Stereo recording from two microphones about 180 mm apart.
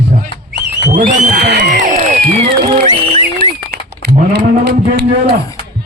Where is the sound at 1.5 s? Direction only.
70° right (ahead or behind).